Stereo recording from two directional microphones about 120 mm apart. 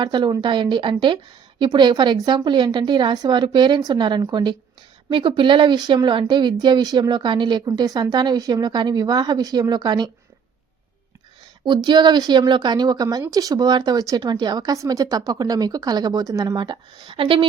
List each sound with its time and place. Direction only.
0.0 s a woman's voice: 40° right (ahead or behind)
11.6 s a woman's voice: 40° right (ahead or behind)